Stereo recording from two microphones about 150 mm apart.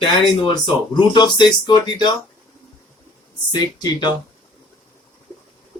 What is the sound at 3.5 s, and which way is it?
Speech, 25° left (ahead or behind).